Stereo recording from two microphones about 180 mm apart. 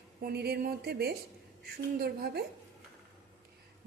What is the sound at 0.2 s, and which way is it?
A woman's voice, 60° right (ahead or behind).